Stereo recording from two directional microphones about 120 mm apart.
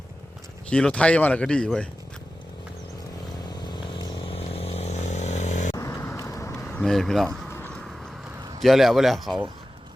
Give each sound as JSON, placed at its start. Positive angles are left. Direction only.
{"t": 0.7, "sound": "speech", "side_deg": 10}
{"t": 3.5, "sound": "motorcycle", "side_deg": 35}
{"t": 5.7, "sound": "vehicle", "side_deg": 25}
{"t": 6.7, "sound": "speech", "side_deg": 5}
{"t": 7.7, "sound": "vehicle", "side_deg": 5}
{"t": 8.6, "sound": "a man's voice", "side_deg": 0}